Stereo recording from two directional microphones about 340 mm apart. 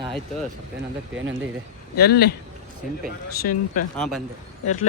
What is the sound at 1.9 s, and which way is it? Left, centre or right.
Speech, left.